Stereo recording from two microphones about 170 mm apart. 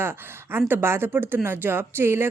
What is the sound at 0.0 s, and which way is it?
Speech, 15° right (ahead or behind).